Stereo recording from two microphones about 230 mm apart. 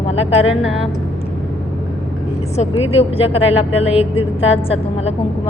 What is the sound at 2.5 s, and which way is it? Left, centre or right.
A woman's voice, left.